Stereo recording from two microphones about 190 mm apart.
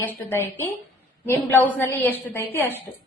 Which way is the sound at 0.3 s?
15° left (ahead or behind).